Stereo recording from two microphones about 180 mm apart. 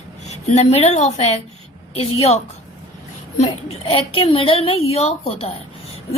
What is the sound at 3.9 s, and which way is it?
A woman's voice, 30° left (ahead or behind).